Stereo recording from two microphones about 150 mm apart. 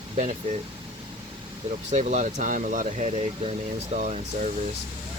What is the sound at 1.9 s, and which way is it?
Speech, 55° right (ahead or behind).